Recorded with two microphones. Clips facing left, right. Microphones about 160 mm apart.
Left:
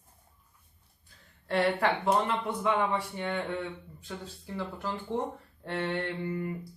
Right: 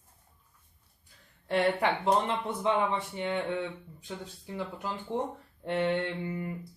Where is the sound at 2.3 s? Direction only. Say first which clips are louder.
Even; 20° right (ahead or behind).